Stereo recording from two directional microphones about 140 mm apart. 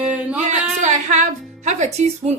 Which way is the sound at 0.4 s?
60° right (ahead or behind).